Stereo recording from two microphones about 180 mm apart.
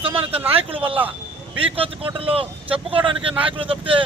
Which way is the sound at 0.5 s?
30° right (ahead or behind).